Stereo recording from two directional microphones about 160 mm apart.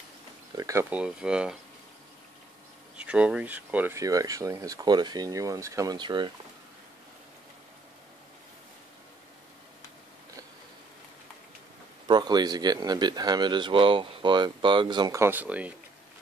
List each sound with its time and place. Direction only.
0.6 s speech: 20° right (ahead or behind)
0.8 s speech: 5° right (ahead or behind)
3.0 s speech: 5° right (ahead or behind); by 6.3 s 30° right (ahead or behind)
12.1 s speech: 25° right (ahead or behind); by 15.7 s 10° right (ahead or behind)